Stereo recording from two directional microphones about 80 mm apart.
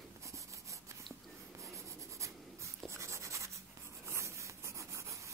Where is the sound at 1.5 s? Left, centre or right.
Right.